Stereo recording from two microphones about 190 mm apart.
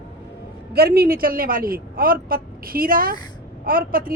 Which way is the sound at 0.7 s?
55° right (ahead or behind).